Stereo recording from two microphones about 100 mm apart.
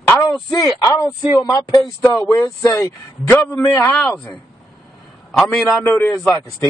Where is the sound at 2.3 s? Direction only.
35° left (ahead or behind); by 5.7 s 5° left (ahead or behind).